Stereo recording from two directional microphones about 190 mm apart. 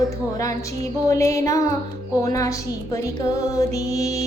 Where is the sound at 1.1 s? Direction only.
15° left (ahead or behind).